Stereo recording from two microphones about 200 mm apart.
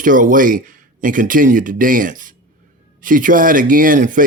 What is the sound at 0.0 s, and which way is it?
Speech, 40° right (ahead or behind).